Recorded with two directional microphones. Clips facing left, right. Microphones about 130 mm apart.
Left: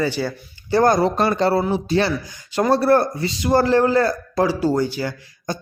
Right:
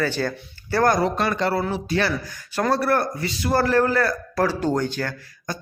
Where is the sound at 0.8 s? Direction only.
25° left (ahead or behind).